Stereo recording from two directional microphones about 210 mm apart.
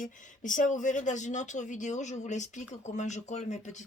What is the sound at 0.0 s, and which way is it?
Speech, 40° left (ahead or behind).